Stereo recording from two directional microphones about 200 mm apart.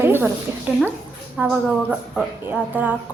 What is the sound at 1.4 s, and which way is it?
A woman's voice, 5° right (ahead or behind).